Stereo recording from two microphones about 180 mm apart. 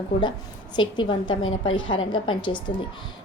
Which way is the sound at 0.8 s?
25° left (ahead or behind).